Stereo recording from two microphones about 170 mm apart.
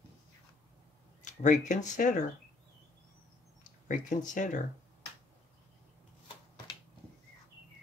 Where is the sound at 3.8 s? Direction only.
50° left (ahead or behind).